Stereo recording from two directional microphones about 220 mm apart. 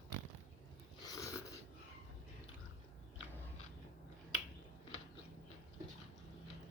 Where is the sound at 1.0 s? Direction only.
15° left (ahead or behind).